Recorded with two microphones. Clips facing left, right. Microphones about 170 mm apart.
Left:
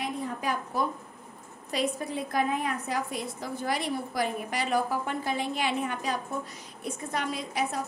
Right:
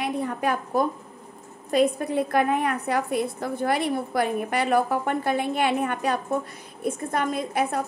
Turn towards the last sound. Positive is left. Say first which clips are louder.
# right 6 dB
turn(degrees=-55)  # may be behind; listen again after turning